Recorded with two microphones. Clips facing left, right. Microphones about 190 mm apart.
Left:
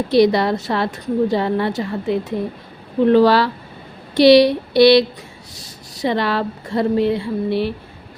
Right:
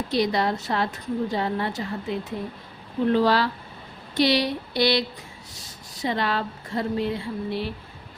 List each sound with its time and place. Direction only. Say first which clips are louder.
0.1 s speech: left 9 dB; 70° left (ahead or behind)